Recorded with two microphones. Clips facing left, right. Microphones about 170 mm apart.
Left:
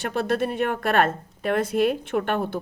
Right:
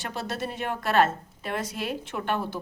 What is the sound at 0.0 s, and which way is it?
Speech, 55° left (ahead or behind).